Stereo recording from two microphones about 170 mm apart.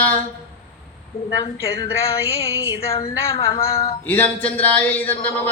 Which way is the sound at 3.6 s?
35° left (ahead or behind).